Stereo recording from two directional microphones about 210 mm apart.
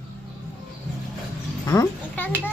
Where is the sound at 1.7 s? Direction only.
10° left (ahead or behind).